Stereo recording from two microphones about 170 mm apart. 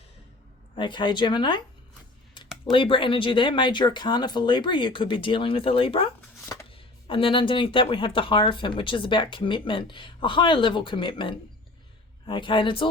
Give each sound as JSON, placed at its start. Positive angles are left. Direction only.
{"t": 0.8, "sound": "speech", "side_deg": 30}
{"t": 2.6, "sound": "speech", "side_deg": 30}
{"t": 6.4, "sound": "shuffling cards", "side_deg": 20}
{"t": 6.7, "sound": "speech", "side_deg": 30}